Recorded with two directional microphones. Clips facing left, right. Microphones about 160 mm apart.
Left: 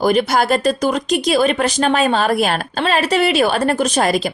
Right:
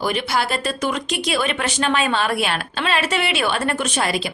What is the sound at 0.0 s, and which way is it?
Speech, 40° left (ahead or behind).